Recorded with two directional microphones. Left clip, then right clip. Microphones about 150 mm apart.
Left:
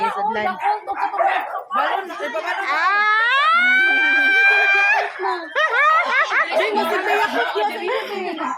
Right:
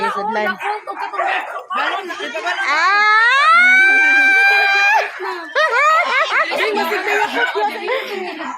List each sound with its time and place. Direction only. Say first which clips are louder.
0.0 s chatter: right 2 dB; 45° right (ahead or behind)
2.6 s a sound: right 4 dB; 70° right (ahead or behind); by 5.0 s 50° right (ahead or behind)
5.5 s snicker: right 3 dB; 50° right (ahead or behind)
6.5 s chatter: right 1 dB; 10° right (ahead or behind)